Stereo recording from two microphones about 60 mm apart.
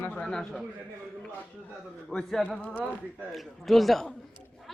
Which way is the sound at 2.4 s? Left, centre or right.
Centre.